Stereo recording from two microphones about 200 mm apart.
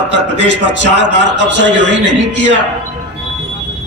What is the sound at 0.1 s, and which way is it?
A man's voice, 65° right (ahead or behind).